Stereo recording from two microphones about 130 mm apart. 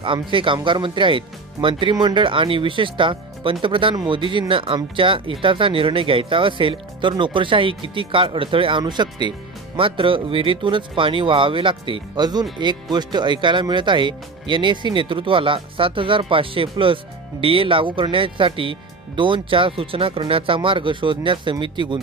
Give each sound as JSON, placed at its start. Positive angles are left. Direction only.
{"t": 0.0, "sound": "speech", "side_deg": -40}